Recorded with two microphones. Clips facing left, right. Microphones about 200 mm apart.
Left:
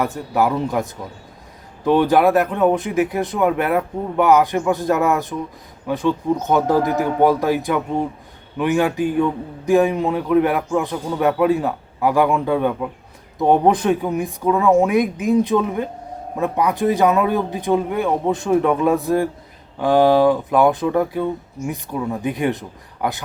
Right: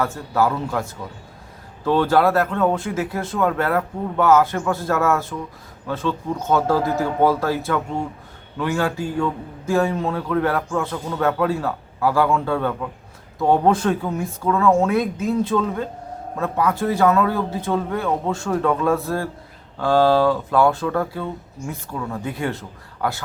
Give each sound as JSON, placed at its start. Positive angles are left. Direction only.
{"t": 0.0, "sound": "a man's voice", "side_deg": 15}